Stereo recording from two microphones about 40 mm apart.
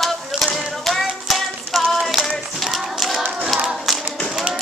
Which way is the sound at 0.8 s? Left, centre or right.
Centre.